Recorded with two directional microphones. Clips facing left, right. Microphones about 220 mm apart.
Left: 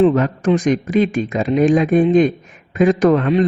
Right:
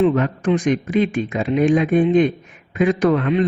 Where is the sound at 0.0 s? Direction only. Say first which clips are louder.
Left 3 dB; 40° left (ahead or behind).